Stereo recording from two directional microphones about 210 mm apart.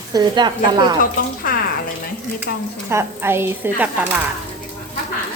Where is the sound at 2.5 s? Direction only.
45° left (ahead or behind).